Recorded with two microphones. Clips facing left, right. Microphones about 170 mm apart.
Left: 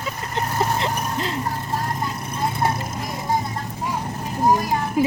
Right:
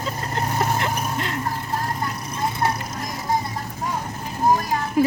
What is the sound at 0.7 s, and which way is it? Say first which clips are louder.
Vehicle: even; 30° left (ahead or behind).